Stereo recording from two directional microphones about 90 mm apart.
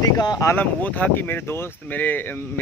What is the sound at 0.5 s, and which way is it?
Speech, 15° left (ahead or behind).